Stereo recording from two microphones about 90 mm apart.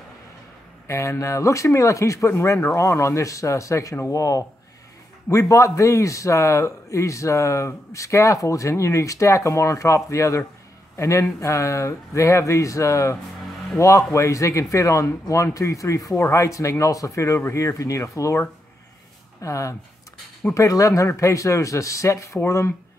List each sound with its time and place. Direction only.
0.8 s speech: 35° left (ahead or behind)
19.4 s speech: 35° left (ahead or behind)